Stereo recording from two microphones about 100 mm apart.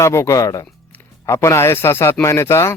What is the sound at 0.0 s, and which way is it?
A man's voice, 30° left (ahead or behind).